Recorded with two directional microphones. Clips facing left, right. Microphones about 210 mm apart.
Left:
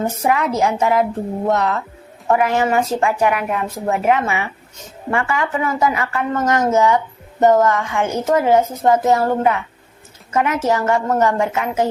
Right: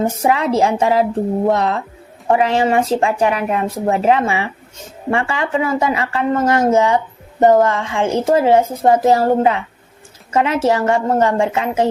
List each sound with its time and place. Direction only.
0.2 s speech: 30° right (ahead or behind)